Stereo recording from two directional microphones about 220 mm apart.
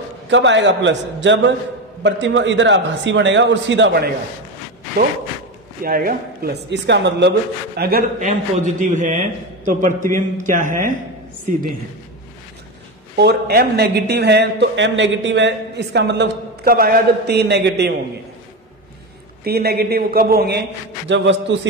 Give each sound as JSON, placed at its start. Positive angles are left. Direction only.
{"t": 0.3, "sound": "a man's voice", "side_deg": -55}
{"t": 5.9, "sound": "a man's voice", "side_deg": -40}
{"t": 8.2, "sound": "a man's voice", "side_deg": -35}
{"t": 13.2, "sound": "a man's voice", "side_deg": -45}
{"t": 19.4, "sound": "a man's voice", "side_deg": -45}